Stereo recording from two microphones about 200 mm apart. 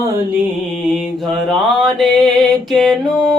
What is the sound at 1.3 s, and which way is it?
Mantra, centre (ahead or behind).